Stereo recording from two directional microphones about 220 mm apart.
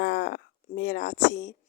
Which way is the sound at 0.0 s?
50° left (ahead or behind).